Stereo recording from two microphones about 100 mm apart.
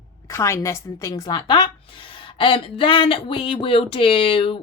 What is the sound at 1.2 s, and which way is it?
A woman's voice, 50° left (ahead or behind).